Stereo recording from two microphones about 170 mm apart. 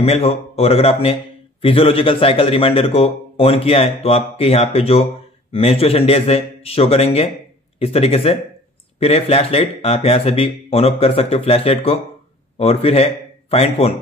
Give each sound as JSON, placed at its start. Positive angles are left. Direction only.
{"t": 0.0, "sound": "a man's voice", "side_deg": 35}